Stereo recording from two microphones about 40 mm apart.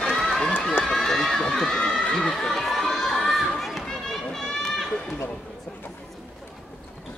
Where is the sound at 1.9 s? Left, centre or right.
Centre.